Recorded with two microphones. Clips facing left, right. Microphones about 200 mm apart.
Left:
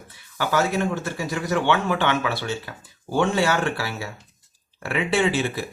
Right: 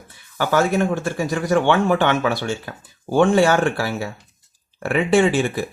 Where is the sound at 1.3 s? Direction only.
50° right (ahead or behind).